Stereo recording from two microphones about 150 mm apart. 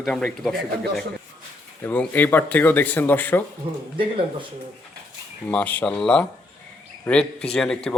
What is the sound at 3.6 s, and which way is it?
Speech, 35° right (ahead or behind).